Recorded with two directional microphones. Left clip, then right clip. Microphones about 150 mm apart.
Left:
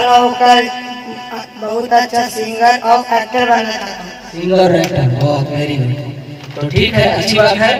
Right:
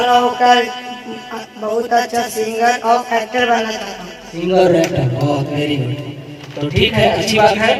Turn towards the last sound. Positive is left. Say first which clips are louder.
# left 2 dB
turn(degrees=20)  # may be behind; listen again after turning